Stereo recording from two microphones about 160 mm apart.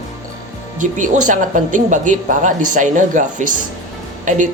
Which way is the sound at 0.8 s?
50° right (ahead or behind).